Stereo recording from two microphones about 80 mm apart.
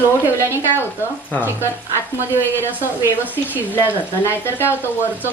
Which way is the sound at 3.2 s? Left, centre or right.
Right.